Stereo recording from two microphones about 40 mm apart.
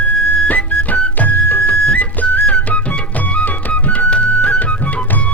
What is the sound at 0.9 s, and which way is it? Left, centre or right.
Music, left.